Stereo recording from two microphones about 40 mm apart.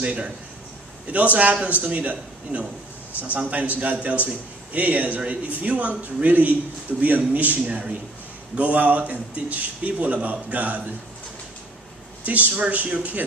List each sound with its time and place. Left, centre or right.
0.0 s a man's voice: right
12.3 s a man's voice: right